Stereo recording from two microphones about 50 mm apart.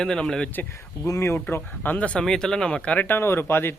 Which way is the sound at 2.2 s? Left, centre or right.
Centre.